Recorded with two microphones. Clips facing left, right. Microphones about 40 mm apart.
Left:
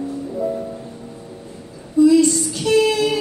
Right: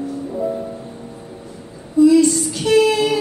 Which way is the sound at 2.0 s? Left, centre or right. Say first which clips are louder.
Right 1 dB; right.